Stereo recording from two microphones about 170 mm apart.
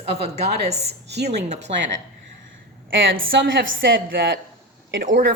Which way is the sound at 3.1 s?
90° right.